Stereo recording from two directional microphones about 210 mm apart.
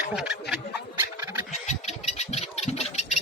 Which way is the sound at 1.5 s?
35° left (ahead or behind).